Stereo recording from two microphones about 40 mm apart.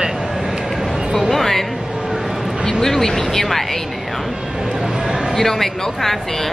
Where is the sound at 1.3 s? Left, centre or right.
Centre.